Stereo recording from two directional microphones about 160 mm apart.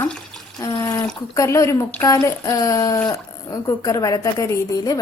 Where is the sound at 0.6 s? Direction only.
25° left (ahead or behind).